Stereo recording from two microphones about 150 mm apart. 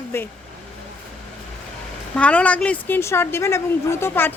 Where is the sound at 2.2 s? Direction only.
10° left (ahead or behind).